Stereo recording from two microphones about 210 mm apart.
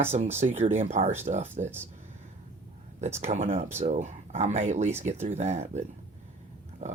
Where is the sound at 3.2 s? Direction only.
35° right (ahead or behind).